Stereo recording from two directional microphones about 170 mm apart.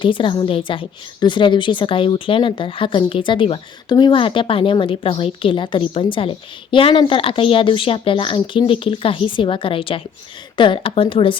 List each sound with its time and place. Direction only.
0.0 s a woman's voice: 30° left (ahead or behind)